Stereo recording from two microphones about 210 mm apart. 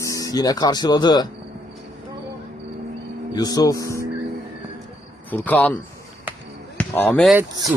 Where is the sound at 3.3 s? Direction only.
20° left (ahead or behind).